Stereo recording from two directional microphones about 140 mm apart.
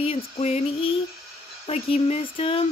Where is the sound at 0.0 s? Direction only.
45° left (ahead or behind).